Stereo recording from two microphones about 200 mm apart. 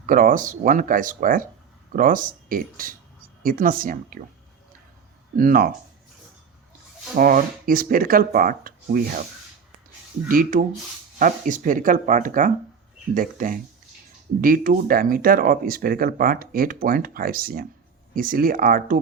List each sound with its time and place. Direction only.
0.0 s speech: 40° right (ahead or behind)
5.4 s speech: 45° right (ahead or behind)
7.2 s speech: 45° right (ahead or behind)
10.2 s speech: 45° right (ahead or behind)